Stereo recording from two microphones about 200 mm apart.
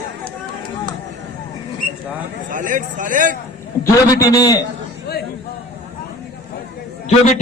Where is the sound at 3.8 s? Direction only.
20° left (ahead or behind).